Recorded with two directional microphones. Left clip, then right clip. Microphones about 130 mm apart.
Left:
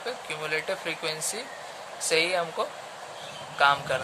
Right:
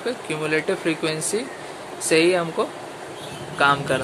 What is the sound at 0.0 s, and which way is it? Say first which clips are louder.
Speech: right 7 dB; 10° left (ahead or behind).